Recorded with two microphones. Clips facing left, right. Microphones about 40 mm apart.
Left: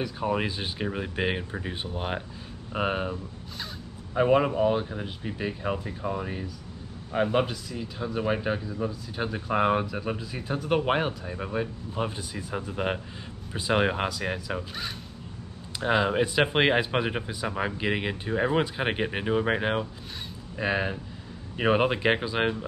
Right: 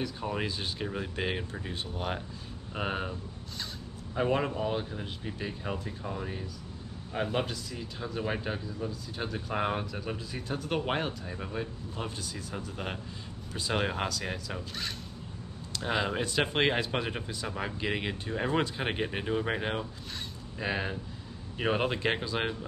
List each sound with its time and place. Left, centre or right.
0.0 s speech: centre
15.7 s a sound: centre
16.1 s speech: centre